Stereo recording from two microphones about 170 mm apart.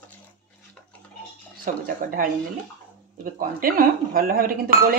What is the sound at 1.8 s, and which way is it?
Speech, 55° right (ahead or behind).